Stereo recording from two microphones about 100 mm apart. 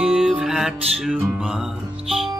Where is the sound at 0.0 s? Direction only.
5° right (ahead or behind).